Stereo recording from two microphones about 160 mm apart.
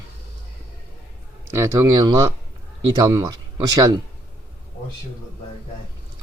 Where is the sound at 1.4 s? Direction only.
15° right (ahead or behind).